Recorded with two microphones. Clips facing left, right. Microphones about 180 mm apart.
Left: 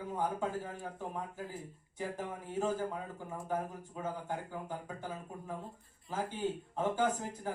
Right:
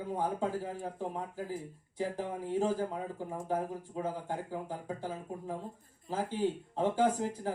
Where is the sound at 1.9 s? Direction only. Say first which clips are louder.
Right 4 dB; 35° right (ahead or behind).